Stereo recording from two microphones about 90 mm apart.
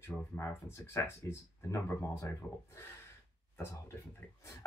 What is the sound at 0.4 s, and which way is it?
Speech, 30° left (ahead or behind).